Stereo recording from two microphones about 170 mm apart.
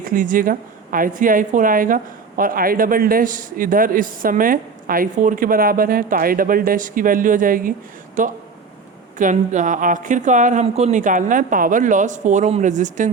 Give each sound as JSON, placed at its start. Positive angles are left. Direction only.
{"t": 0.0, "sound": "a woman's voice", "side_deg": -50}